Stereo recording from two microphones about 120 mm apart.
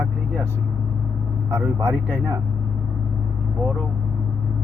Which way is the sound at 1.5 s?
20° right (ahead or behind).